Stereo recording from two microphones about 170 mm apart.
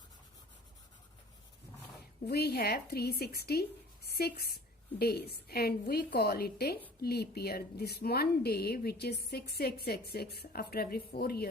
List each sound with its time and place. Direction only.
2.2 s a woman's voice: 70° left (ahead or behind)